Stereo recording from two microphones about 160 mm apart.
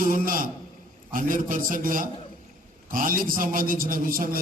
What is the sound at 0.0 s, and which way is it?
A man's voice, 60° right (ahead or behind).